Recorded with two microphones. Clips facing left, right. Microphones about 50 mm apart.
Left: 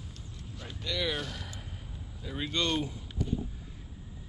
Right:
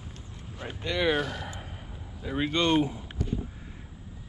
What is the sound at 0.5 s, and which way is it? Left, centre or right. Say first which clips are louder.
Boat: right 5 dB; right.